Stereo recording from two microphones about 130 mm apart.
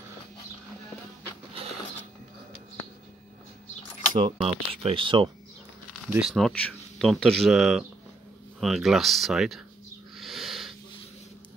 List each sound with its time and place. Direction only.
4.4 s speech: 45° right (ahead or behind)
6.0 s speech: 10° right (ahead or behind)
6.3 s speech: 5° left (ahead or behind)
10.1 s a sound: centre (ahead or behind)